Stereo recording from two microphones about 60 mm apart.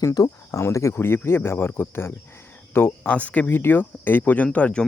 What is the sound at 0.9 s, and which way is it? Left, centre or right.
Speech, left.